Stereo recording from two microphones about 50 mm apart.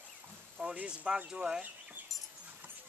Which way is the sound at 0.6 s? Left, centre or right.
Right.